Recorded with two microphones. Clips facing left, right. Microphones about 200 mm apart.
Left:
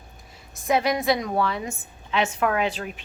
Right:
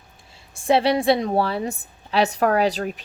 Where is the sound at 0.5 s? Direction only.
30° right (ahead or behind).